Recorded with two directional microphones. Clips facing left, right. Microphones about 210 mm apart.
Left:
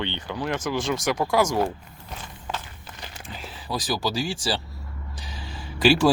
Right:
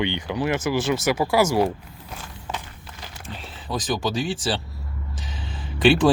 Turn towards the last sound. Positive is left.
turn(degrees=0)  # may be behind; listen again after turning